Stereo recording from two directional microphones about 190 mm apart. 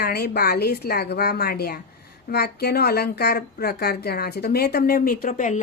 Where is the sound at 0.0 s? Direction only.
55° left (ahead or behind).